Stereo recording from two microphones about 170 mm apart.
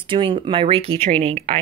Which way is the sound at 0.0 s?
30° right (ahead or behind).